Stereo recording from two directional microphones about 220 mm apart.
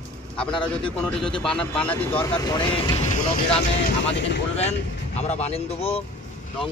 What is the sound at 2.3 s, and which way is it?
Speech, 15° left (ahead or behind).